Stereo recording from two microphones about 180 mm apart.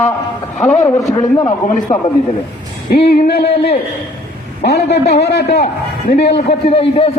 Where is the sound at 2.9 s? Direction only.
60° left (ahead or behind).